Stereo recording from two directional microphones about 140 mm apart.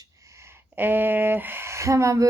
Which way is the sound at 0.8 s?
15° right (ahead or behind).